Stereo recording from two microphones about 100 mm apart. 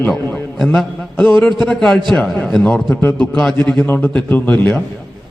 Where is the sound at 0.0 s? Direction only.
15° left (ahead or behind).